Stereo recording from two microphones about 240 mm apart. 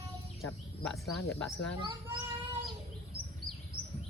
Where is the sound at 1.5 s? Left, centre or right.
Left.